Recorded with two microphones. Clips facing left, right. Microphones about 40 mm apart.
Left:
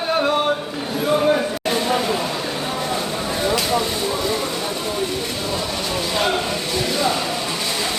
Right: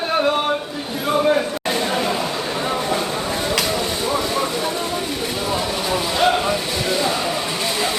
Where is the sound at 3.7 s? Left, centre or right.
Centre.